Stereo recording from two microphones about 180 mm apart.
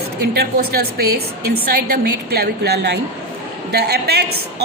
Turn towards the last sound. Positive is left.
turn(degrees=-65)  # may be behind; listen again after turning